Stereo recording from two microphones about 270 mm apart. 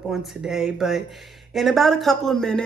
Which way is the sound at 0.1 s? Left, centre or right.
Centre.